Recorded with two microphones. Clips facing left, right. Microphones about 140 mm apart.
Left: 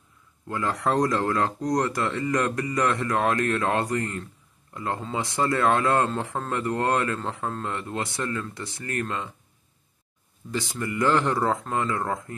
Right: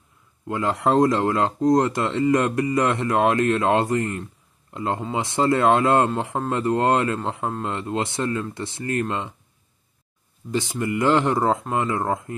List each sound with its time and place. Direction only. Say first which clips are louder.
0.5 s speech: right 4 dB; 25° right (ahead or behind)
10.5 s speech: right 5 dB; 20° right (ahead or behind)